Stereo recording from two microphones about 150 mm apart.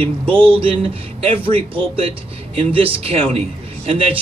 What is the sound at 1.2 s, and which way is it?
A man's voice, 40° right (ahead or behind).